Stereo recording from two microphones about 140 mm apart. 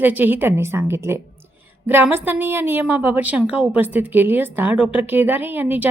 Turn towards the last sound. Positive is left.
turn(degrees=-15)  # may be behind; listen again after turning